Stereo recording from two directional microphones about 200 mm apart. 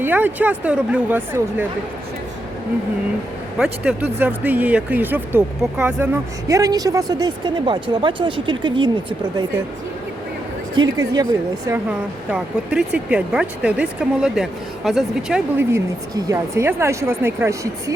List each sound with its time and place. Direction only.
0.0 s speech: 10° right (ahead or behind)
3.6 s speech: 5° right (ahead or behind)
6.5 s speech: 20° right (ahead or behind)
10.8 s speech: 20° right (ahead or behind)